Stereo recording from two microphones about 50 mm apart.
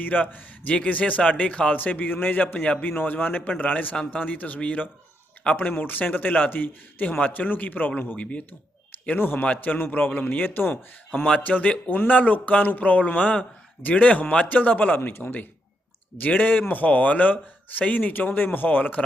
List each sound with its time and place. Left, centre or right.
0.0 s a man's voice: left
9.1 s speech: left
9.4 s a man's voice: left
11.4 s a man's voice: left